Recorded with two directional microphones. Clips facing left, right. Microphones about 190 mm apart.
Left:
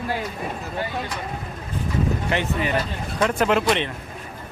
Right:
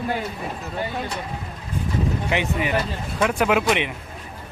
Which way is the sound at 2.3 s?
15° right (ahead or behind).